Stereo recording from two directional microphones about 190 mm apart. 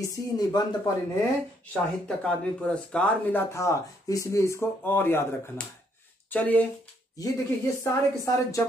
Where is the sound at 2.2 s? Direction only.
5° left (ahead or behind).